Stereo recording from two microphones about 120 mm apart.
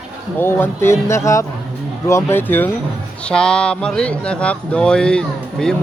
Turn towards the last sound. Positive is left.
turn(degrees=5)  # may be behind; listen again after turning